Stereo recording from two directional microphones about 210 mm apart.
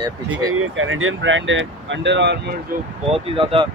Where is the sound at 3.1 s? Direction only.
25° right (ahead or behind).